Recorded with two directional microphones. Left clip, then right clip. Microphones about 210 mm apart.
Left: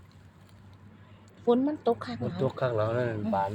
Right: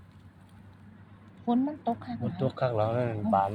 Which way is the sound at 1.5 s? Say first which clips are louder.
Left 4 dB; 40° left (ahead or behind).